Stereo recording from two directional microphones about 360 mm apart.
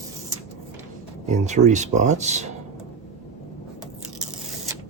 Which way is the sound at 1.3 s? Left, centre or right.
Centre.